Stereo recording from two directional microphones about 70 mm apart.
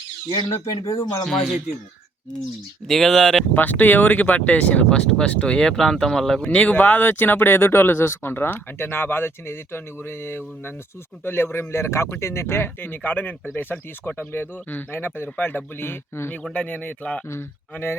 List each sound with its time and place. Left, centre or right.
1.2 s speech: centre
2.8 s speech: centre
3.5 s speech: left; by 6.5 s centre
6.5 s speech: left
16.4 s speech: centre
17.2 s speech: left